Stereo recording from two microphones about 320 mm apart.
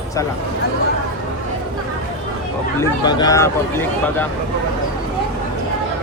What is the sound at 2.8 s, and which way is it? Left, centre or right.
Speech, centre.